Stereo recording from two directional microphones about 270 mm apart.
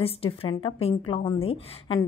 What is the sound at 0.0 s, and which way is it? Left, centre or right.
A woman's voice, left.